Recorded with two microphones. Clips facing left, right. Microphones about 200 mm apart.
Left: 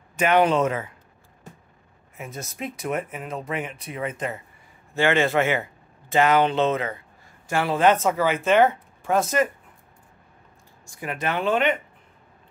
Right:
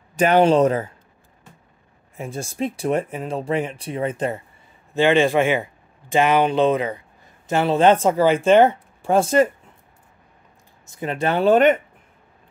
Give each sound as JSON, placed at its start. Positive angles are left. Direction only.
{"t": 0.1, "sound": "speech", "side_deg": -35}
{"t": 2.1, "sound": "speech", "side_deg": -30}
{"t": 4.9, "sound": "speech", "side_deg": -15}
{"t": 11.0, "sound": "speech", "side_deg": -30}